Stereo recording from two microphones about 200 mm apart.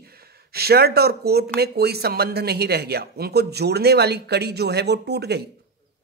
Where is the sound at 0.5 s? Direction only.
50° right (ahead or behind).